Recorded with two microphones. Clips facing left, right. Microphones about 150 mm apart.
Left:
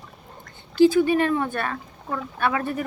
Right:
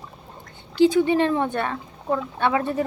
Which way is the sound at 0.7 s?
20° right (ahead or behind).